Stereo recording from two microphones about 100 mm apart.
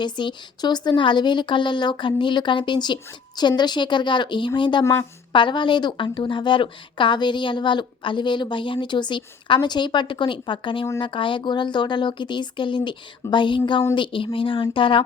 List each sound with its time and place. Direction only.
0.0 s a woman's voice: 50° left (ahead or behind)